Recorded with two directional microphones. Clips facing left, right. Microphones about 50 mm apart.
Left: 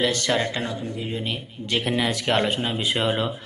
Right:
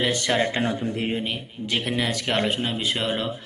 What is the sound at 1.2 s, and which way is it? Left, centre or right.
Speech, centre.